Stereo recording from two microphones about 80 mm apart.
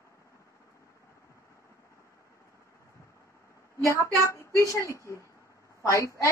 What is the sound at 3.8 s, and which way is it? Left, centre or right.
Speech, left.